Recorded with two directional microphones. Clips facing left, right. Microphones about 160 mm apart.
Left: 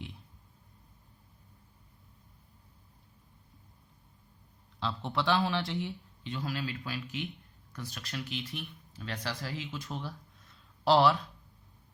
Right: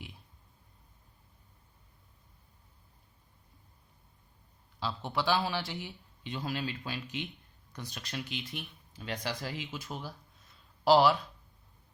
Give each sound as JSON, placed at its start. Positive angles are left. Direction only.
{"t": 4.8, "sound": "speech", "side_deg": -5}
{"t": 6.2, "sound": "speech", "side_deg": -20}
{"t": 9.7, "sound": "speech", "side_deg": -5}